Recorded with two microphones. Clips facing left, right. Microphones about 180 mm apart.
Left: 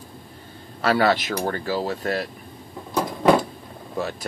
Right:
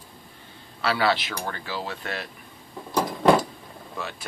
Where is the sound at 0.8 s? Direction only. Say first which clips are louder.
Left 4 dB; 45° left (ahead or behind).